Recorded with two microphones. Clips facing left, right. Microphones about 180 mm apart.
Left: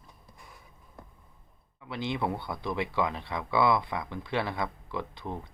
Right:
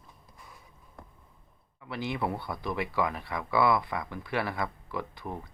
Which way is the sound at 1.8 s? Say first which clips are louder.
Left 1 dB; 20° left (ahead or behind).